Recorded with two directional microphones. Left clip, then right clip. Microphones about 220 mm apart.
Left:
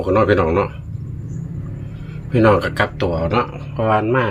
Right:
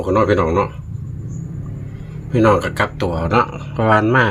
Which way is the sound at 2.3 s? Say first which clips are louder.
Even; centre (ahead or behind).